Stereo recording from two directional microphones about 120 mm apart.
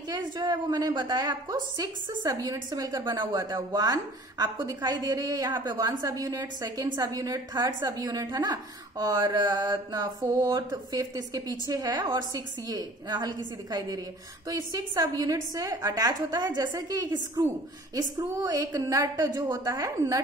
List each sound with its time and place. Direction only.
0.1 s a woman's voice: 35° right (ahead or behind)